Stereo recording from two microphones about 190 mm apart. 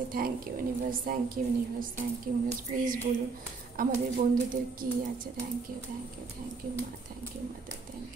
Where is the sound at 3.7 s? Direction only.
45° right (ahead or behind).